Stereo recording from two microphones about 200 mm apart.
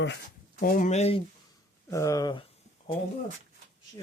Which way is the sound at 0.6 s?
40° left (ahead or behind).